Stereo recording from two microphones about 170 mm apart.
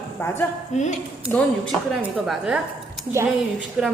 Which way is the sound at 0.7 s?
45° left (ahead or behind).